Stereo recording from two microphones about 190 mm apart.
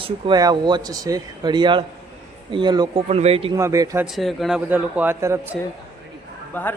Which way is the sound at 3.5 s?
15° right (ahead or behind).